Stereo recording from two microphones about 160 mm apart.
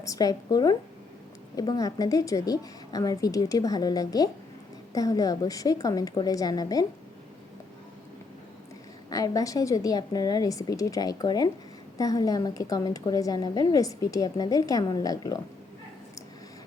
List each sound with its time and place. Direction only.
0.0 s a woman's voice: 20° left (ahead or behind)
9.0 s a woman's voice: 20° left (ahead or behind)